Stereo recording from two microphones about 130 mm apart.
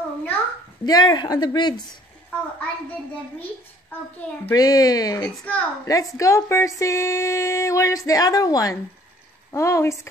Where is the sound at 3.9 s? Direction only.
15° left (ahead or behind).